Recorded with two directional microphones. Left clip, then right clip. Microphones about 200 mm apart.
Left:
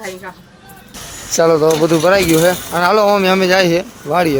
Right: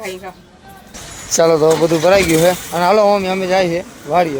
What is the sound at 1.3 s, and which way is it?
Speech, 10° left (ahead or behind).